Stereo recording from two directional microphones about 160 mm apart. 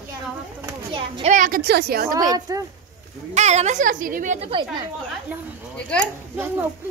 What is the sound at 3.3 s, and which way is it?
A woman's voice, 45° right (ahead or behind).